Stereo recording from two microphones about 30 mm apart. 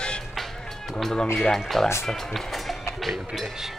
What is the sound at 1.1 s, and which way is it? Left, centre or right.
Speech, left.